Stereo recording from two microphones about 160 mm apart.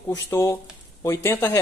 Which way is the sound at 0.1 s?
20° left (ahead or behind).